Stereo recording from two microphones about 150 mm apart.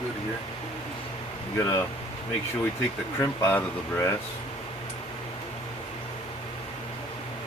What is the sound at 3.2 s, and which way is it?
Speech, 15° left (ahead or behind).